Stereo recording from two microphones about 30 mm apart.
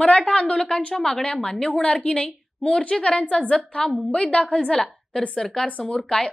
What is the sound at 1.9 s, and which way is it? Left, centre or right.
A woman's voice, left.